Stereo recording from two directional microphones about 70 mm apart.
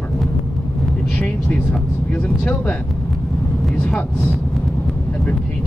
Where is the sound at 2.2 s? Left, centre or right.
Centre.